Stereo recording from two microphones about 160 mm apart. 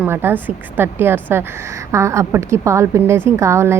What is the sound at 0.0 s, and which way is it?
A woman's voice, 15° right (ahead or behind).